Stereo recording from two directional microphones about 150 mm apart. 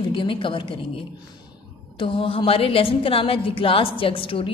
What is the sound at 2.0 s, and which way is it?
A woman's voice, 40° left (ahead or behind).